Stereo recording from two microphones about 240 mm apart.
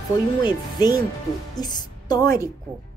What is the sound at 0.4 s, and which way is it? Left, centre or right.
A woman's voice, centre.